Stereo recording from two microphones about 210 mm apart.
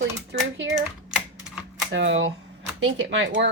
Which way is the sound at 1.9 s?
60° right (ahead or behind).